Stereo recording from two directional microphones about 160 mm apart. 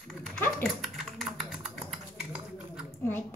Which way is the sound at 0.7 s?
Centre (ahead or behind).